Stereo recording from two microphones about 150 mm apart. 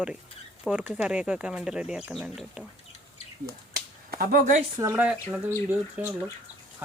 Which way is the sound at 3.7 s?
80° right.